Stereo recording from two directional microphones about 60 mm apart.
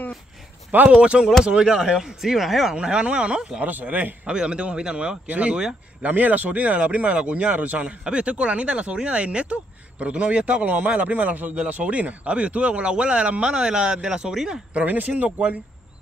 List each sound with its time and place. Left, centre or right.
0.8 s speech: centre
3.6 s speech: right
6.0 s speech: right; by 14.6 s centre
14.7 s speech: right